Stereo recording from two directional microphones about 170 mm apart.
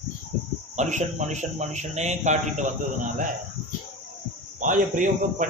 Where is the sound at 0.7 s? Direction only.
45° right (ahead or behind).